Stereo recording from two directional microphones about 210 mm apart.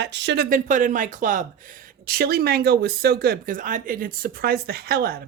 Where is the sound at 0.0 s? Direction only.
55° right (ahead or behind).